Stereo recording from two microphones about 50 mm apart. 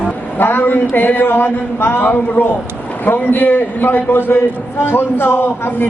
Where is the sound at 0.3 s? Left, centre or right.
Left.